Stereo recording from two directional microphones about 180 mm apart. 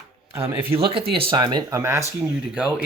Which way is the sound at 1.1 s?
30° right (ahead or behind).